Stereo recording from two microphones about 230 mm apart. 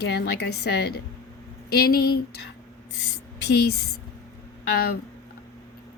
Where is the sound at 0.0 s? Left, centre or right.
Left.